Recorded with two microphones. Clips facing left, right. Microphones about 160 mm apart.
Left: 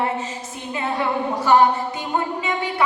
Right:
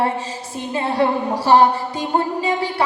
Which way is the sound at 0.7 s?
35° right (ahead or behind).